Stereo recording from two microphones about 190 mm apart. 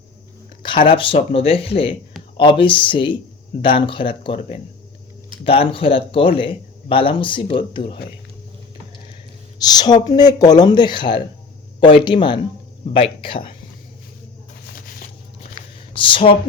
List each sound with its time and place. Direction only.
0.6 s a man's voice: 25° left (ahead or behind)
9.6 s a man's voice: 20° left (ahead or behind)
16.0 s a man's voice: 25° left (ahead or behind)